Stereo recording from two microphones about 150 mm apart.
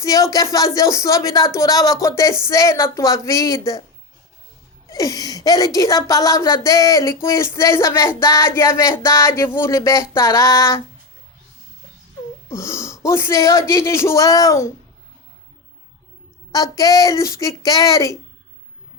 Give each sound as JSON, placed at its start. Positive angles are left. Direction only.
{"t": 0.0, "sound": "a woman's voice", "side_deg": 20}
{"t": 4.9, "sound": "a woman's voice", "side_deg": 25}
{"t": 12.5, "sound": "a woman's voice", "side_deg": 20}
{"t": 16.5, "sound": "a woman's voice", "side_deg": 25}